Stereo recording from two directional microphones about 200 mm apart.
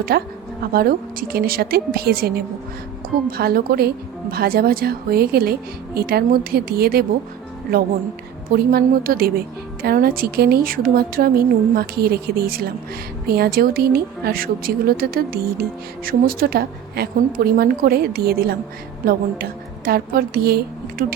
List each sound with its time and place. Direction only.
0.1 s a woman's voice: 50° right (ahead or behind)
8.5 s a woman's voice: 50° right (ahead or behind)